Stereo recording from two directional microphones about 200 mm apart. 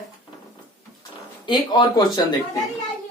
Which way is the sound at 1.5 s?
20° left (ahead or behind).